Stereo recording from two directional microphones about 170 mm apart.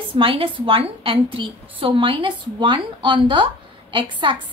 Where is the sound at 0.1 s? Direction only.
30° right (ahead or behind).